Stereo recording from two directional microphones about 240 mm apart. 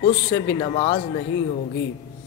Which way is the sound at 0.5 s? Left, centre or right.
Left.